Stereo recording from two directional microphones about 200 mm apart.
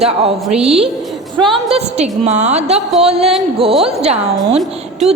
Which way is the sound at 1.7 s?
35° right (ahead or behind).